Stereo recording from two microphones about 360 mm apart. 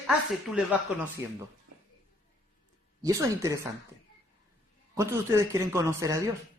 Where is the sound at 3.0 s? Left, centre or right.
Centre.